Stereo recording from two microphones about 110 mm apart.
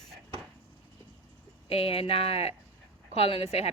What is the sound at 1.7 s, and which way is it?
Speech, 60° left (ahead or behind).